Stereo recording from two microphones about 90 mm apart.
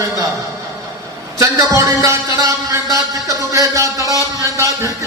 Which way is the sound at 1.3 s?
35° right (ahead or behind).